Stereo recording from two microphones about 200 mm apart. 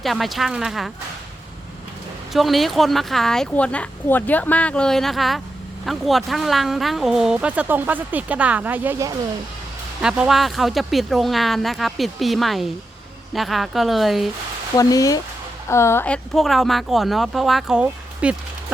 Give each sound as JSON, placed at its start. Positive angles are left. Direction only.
{"t": 0.0, "sound": "speech", "side_deg": 0}
{"t": 2.3, "sound": "speech", "side_deg": 0}
{"t": 14.8, "sound": "speech", "side_deg": 15}